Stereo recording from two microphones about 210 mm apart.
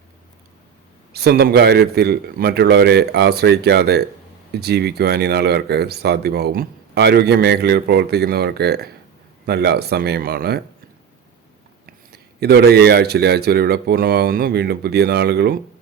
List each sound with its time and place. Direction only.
1.1 s speech: 50° right (ahead or behind)
12.1 s speech: 50° right (ahead or behind)